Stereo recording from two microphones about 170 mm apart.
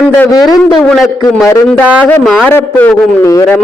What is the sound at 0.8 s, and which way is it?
A man's voice, centre (ahead or behind).